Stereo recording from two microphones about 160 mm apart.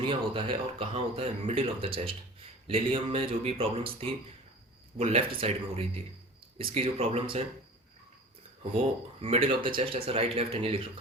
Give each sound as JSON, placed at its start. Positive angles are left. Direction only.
{"t": 0.0, "sound": "a man's voice", "side_deg": -35}
{"t": 9.2, "sound": "a man's voice", "side_deg": -35}